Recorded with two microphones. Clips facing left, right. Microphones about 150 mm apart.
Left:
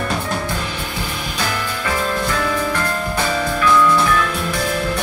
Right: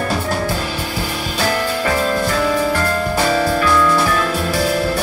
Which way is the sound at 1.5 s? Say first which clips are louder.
Right 6 dB; 35° right (ahead or behind).